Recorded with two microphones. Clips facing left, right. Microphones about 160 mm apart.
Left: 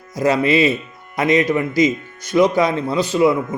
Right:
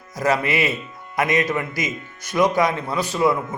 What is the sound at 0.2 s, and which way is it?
A man's voice, 30° left (ahead or behind).